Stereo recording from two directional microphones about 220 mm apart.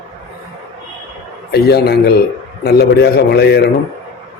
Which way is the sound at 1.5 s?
45° left (ahead or behind).